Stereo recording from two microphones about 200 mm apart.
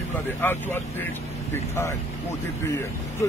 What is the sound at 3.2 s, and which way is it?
Speech, 15° left (ahead or behind).